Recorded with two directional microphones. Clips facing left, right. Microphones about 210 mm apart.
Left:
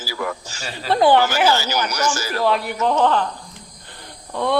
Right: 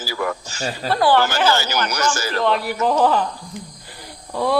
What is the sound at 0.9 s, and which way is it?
Speech, 20° left (ahead or behind).